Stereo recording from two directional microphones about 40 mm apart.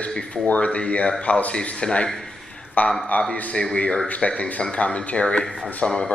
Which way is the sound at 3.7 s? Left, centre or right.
Left.